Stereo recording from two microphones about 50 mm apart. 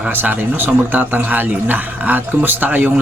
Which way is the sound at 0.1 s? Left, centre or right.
Right.